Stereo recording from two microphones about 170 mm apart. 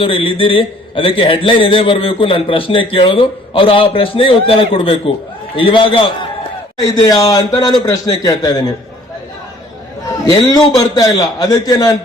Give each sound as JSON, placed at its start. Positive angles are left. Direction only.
{"t": 0.0, "sound": "a man's voice", "side_deg": 30}
{"t": 10.2, "sound": "a man's voice", "side_deg": 25}